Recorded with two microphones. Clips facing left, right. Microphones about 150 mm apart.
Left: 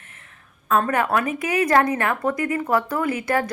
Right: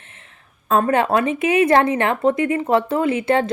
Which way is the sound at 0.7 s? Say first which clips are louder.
Right 3 dB; 25° right (ahead or behind).